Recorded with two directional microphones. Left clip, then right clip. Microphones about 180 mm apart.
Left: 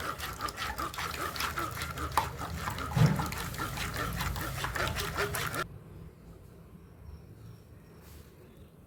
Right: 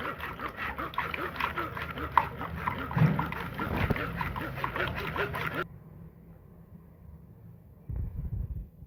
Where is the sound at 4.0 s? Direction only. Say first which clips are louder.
Right 1 dB; 5° right (ahead or behind).